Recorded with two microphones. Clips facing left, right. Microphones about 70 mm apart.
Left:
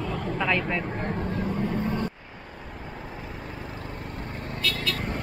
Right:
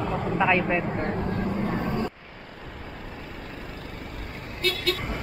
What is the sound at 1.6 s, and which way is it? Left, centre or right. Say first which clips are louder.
Vehicle: even; right.